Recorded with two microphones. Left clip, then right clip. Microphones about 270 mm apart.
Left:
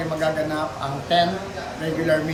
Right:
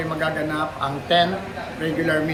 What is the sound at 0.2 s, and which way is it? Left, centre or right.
Speech, centre.